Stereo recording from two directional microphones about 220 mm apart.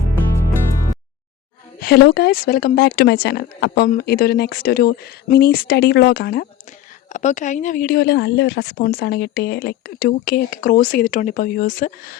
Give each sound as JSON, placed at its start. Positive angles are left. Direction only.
{"t": 1.8, "sound": "speech", "side_deg": 45}
{"t": 7.1, "sound": "speech", "side_deg": 35}